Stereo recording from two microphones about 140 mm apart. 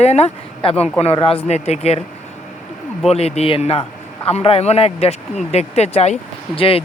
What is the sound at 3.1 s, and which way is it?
Speech, 50° left (ahead or behind).